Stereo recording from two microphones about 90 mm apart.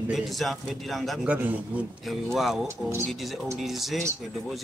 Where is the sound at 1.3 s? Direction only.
15° right (ahead or behind).